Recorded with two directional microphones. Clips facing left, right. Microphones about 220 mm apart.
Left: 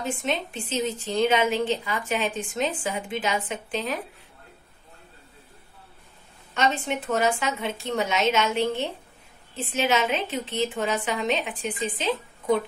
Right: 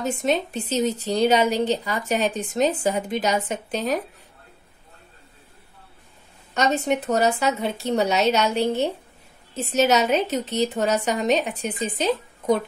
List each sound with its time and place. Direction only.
0.0 s a woman's voice: 40° right (ahead or behind)
6.5 s a woman's voice: 40° right (ahead or behind)